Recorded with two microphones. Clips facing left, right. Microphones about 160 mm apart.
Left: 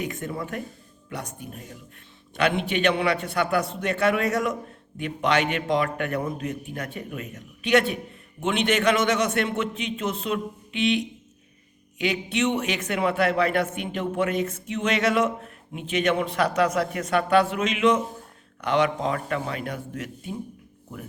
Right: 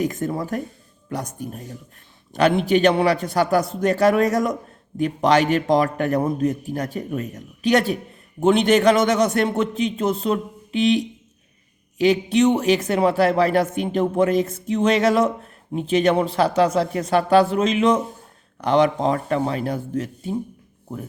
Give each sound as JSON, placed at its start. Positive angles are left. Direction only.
{"t": 0.0, "sound": "speech", "side_deg": -40}